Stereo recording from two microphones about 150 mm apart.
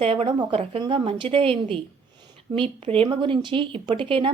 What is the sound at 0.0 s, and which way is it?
A woman's voice, 35° right (ahead or behind).